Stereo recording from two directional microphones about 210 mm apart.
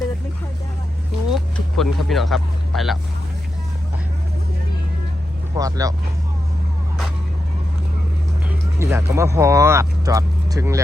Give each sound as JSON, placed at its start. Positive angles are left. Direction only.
{"t": 1.3, "sound": "vehicle", "side_deg": 0}
{"t": 5.5, "sound": "speech", "side_deg": -15}
{"t": 8.4, "sound": "speech", "side_deg": -10}